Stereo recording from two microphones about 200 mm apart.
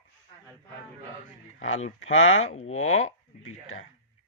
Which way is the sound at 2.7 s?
90° left.